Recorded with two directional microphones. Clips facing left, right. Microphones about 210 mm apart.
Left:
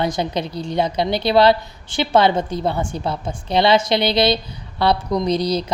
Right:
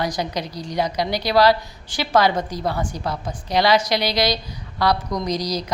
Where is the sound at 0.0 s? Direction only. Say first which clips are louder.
Left 3 dB; 25° left (ahead or behind).